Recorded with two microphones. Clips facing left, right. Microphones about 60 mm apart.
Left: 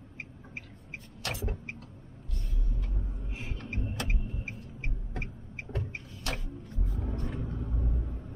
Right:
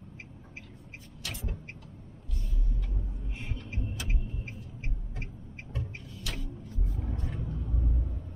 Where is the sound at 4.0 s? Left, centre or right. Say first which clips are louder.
Left 3 dB; left.